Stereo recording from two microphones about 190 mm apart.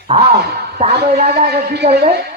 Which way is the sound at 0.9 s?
55° right (ahead or behind).